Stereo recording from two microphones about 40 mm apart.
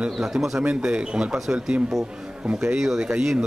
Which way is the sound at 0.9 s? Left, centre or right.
Right.